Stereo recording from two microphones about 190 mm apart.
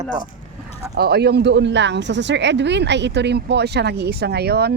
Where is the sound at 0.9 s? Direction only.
55° right (ahead or behind).